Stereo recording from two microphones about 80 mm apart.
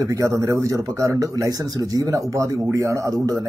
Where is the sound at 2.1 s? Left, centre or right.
Right.